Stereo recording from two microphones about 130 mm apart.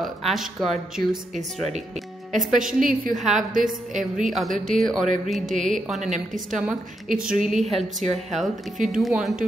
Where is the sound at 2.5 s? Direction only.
90° right.